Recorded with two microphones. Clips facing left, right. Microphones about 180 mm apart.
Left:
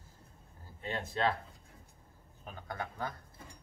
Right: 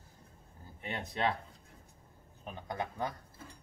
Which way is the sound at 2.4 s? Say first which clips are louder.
Right 3 dB; 20° right (ahead or behind).